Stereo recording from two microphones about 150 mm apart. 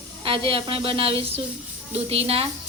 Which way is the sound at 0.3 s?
35° right (ahead or behind).